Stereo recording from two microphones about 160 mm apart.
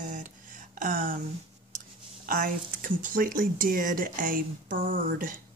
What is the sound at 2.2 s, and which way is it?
Speech, 55° right (ahead or behind).